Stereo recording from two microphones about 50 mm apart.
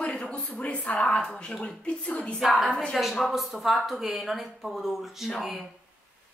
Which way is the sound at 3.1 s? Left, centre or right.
Centre.